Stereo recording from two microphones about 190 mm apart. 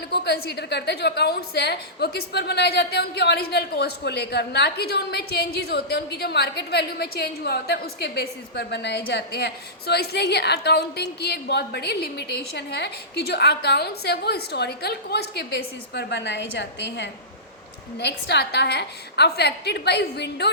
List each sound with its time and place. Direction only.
0.1 s a woman's voice: 55° left (ahead or behind)